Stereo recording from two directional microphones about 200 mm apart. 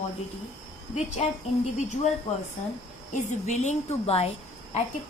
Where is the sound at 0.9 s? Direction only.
35° left (ahead or behind).